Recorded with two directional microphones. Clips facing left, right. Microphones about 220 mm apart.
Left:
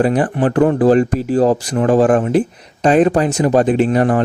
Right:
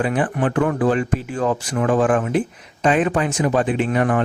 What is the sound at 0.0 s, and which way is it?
Speech, 40° left (ahead or behind).